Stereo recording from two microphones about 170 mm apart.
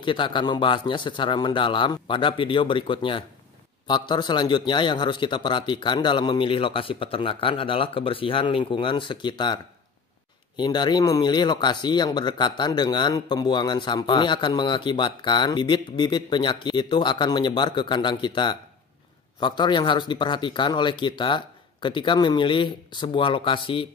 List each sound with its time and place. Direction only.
0.0 s speech: 30° left (ahead or behind)